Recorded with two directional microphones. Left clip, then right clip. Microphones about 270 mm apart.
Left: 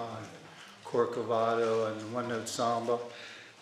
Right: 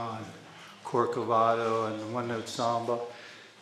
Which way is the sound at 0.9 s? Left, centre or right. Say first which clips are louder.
Right 3 dB; right.